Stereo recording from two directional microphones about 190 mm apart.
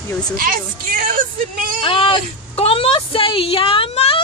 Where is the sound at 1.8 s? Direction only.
30° left (ahead or behind).